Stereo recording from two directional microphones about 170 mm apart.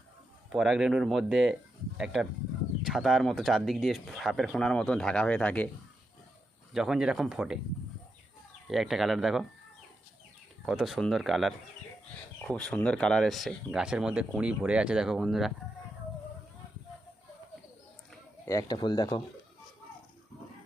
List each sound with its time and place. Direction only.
0.5 s speech: centre (ahead or behind)
2.8 s speech: centre (ahead or behind)
6.7 s speech: 5° right (ahead or behind)
8.6 s speech: centre (ahead or behind)
10.7 s speech: centre (ahead or behind)
18.4 s speech: 20° left (ahead or behind)